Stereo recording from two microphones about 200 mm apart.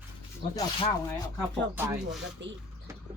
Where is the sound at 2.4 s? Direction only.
65° right (ahead or behind).